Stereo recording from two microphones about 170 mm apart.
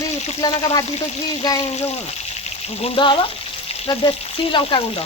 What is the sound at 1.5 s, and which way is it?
Speech, 40° left (ahead or behind).